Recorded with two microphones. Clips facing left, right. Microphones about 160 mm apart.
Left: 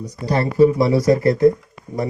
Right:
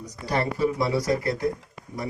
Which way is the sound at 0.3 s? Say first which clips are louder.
Left 9 dB; 30° left (ahead or behind).